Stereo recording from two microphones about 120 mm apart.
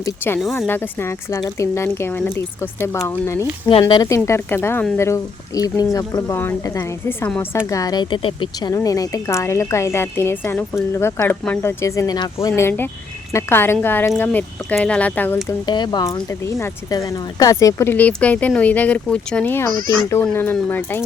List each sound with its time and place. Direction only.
0.7 s speech: 20° left (ahead or behind)
3.7 s speech: 50° left (ahead or behind)
3.9 s speech: 30° left (ahead or behind)
7.7 s speech: 30° left (ahead or behind)
8.7 s speech: 30° left (ahead or behind)
15.6 s speech: 35° left (ahead or behind)
17.9 s speech: 10° left (ahead or behind)